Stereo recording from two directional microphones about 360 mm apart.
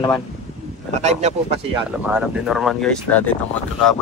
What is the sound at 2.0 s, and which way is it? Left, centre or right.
Speech, centre.